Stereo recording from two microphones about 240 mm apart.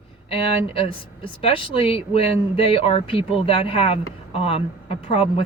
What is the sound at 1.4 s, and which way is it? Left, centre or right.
Speech, left.